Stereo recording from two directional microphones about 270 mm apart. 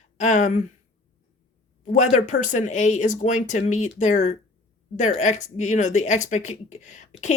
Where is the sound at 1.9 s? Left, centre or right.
Left.